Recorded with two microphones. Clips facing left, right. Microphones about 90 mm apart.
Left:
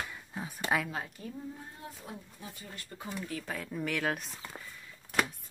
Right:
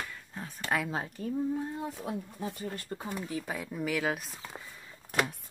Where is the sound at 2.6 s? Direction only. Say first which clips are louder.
Right 8 dB; 40° right (ahead or behind).